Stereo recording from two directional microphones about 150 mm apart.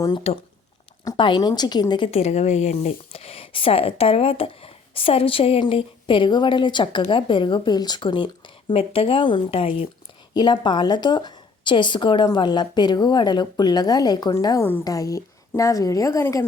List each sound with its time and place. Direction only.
0.3 s speech: 45° left (ahead or behind)
1.0 s a woman's voice: 30° left (ahead or behind)
2.0 s speech: 45° left (ahead or behind)
10.3 s a woman's voice: 30° left (ahead or behind)